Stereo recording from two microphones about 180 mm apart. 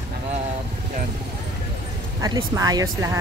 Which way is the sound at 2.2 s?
20° right (ahead or behind).